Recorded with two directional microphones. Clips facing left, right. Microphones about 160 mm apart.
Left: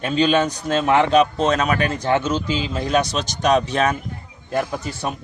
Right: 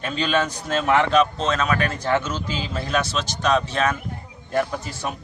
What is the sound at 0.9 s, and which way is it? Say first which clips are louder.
Speech: left 2 dB; 30° left (ahead or behind).